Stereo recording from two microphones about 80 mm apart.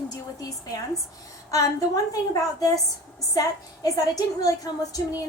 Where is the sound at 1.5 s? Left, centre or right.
Left.